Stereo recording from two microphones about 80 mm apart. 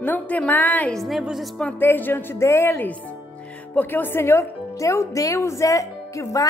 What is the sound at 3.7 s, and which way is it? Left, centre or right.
A woman's voice, left.